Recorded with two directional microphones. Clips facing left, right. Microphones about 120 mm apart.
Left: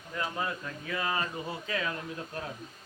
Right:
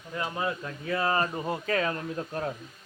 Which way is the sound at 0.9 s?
40° right (ahead or behind).